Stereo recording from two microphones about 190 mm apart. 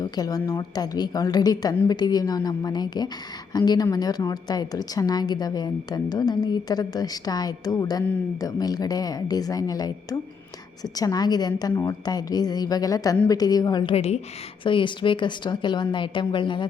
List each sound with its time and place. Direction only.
0.0 s a woman's voice: 20° left (ahead or behind)